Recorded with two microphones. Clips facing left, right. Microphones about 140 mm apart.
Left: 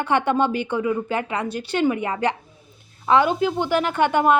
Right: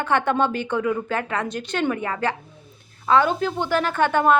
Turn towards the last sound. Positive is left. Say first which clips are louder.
# left 1 dB
turn(degrees=15)  # may be behind; listen again after turning